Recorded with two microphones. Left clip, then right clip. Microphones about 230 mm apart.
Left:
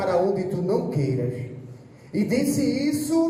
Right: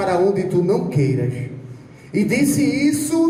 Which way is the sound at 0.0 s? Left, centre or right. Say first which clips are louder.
Right 4 dB; right.